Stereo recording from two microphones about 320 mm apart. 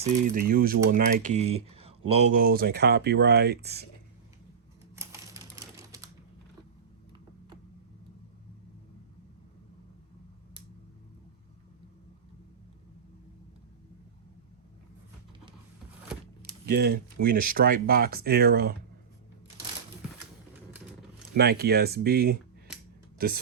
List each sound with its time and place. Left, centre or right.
0.0 s speech: right
4.9 s typewriter: centre
16.4 s speech: right
21.3 s speech: right